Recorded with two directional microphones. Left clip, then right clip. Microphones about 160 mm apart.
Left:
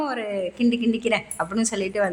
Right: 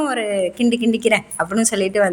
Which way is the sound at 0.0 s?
15° right (ahead or behind).